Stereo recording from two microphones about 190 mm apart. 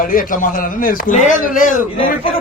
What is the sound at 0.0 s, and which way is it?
A man's voice, 45° left (ahead or behind).